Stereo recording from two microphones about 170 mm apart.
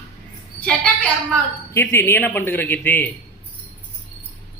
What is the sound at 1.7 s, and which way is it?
A man's voice, 15° left (ahead or behind).